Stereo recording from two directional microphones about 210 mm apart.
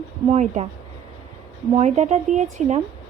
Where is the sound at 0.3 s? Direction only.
30° right (ahead or behind).